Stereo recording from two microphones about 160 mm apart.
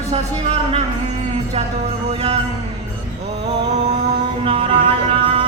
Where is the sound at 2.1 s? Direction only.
40° right (ahead or behind).